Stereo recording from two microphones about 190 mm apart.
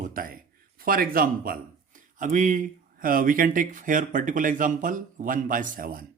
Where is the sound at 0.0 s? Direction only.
50° right (ahead or behind).